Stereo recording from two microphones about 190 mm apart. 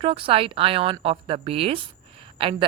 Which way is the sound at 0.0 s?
30° right (ahead or behind).